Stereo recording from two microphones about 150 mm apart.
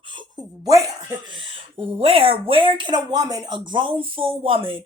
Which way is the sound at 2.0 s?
40° right (ahead or behind).